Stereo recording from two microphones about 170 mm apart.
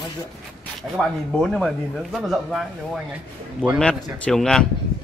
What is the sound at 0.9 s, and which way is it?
Speech, centre (ahead or behind).